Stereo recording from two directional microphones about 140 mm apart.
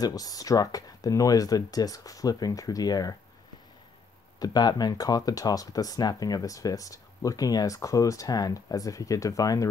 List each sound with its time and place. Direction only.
0.0 s speech: 25° left (ahead or behind)
4.4 s speech: 30° left (ahead or behind)